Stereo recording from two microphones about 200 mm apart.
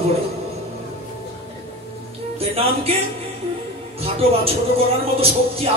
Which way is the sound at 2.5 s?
30° right (ahead or behind).